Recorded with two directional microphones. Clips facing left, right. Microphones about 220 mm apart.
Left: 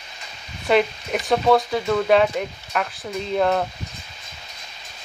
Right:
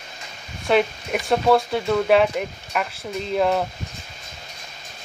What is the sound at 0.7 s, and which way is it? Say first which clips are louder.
Speech: left 1 dB; centre (ahead or behind).